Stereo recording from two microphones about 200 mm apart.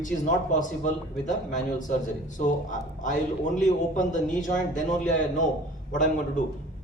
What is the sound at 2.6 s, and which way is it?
Speech, 40° left (ahead or behind).